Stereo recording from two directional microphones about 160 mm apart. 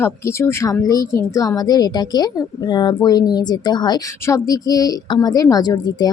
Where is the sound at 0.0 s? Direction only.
15° left (ahead or behind).